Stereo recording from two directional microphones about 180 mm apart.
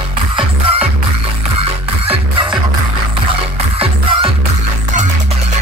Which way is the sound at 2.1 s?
30° right (ahead or behind).